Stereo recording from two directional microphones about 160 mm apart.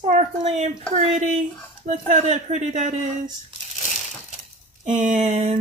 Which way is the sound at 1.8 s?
45° right (ahead or behind).